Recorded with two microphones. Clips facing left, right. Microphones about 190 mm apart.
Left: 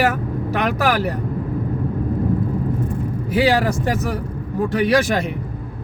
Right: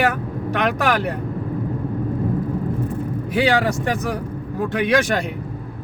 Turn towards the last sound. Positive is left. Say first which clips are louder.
# left 2 dB
turn(degrees=0)  # may be behind; listen again after turning